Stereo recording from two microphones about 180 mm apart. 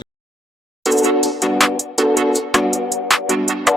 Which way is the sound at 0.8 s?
Centre (ahead or behind).